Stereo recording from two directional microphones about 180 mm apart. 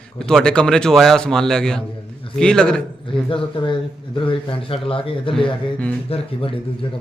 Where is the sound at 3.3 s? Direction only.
30° left (ahead or behind).